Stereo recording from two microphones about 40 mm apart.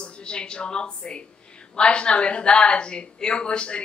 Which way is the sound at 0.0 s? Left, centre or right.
Left.